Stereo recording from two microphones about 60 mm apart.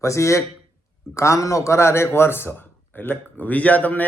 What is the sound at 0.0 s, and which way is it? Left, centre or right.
A man's voice, left.